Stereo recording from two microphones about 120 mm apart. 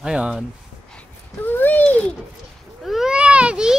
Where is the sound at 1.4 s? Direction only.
15° left (ahead or behind).